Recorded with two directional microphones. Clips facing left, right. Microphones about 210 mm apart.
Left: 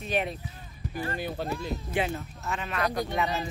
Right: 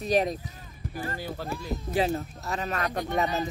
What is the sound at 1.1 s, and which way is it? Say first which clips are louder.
Speech: left 2 dB; 20° left (ahead or behind).